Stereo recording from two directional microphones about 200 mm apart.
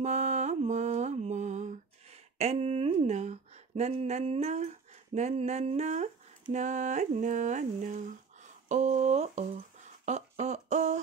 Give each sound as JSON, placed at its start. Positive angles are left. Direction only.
{"t": 0.0, "sound": "mantra", "side_deg": -35}
{"t": 2.3, "sound": "speech", "side_deg": -35}
{"t": 10.0, "sound": "a sound", "side_deg": -35}